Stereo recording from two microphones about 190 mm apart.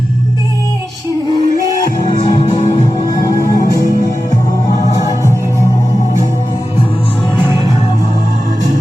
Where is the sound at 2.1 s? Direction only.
25° left (ahead or behind).